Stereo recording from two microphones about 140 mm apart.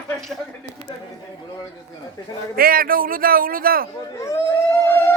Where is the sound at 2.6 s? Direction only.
90° right.